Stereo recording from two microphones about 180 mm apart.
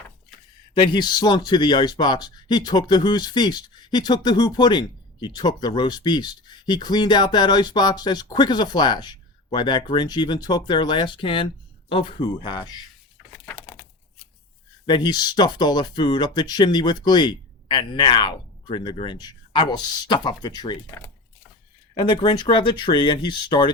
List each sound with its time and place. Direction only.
0.7 s speech: 25° left (ahead or behind)
13.3 s a sound: 10° left (ahead or behind)
14.8 s speech: 25° left (ahead or behind)